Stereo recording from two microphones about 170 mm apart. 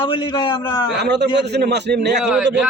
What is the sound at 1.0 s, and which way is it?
A man's voice, 85° right.